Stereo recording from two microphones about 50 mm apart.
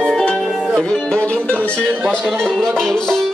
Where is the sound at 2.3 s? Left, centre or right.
Centre.